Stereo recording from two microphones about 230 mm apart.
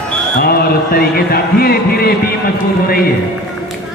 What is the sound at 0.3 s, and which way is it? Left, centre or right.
Music, left.